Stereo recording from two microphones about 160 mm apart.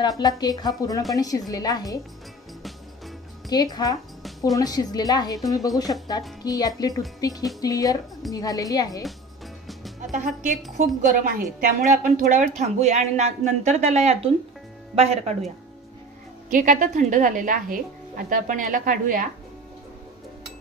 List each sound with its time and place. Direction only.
0.4 s a woman's voice: 25° left (ahead or behind)
3.4 s a woman's voice: 25° left (ahead or behind)
6.4 s a woman's voice: 25° left (ahead or behind)
9.7 s music: centre (ahead or behind)
10.1 s speech: 55° right (ahead or behind)
16.4 s speech: 55° right (ahead or behind)